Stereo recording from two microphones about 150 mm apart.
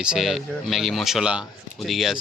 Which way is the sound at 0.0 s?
5° right (ahead or behind).